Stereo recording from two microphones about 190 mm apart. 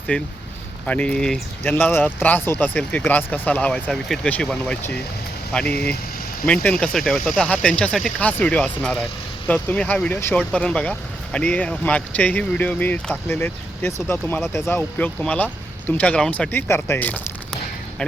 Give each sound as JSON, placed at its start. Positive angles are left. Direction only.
{"t": 0.1, "sound": "speech", "side_deg": 5}
{"t": 5.7, "sound": "speech", "side_deg": 55}
{"t": 6.4, "sound": "speech", "side_deg": 5}